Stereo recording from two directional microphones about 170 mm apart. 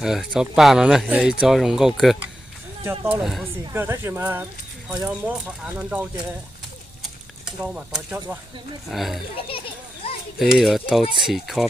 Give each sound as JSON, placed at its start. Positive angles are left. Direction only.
{"t": 0.0, "sound": "speech", "side_deg": -5}
{"t": 2.8, "sound": "speech", "side_deg": -15}
{"t": 3.2, "sound": "speech", "side_deg": 0}
{"t": 3.7, "sound": "speech", "side_deg": -15}
{"t": 7.0, "sound": "a sound", "side_deg": -5}
{"t": 8.9, "sound": "speech", "side_deg": 0}
{"t": 10.0, "sound": "a sound", "side_deg": 35}
{"t": 10.4, "sound": "speech", "side_deg": 0}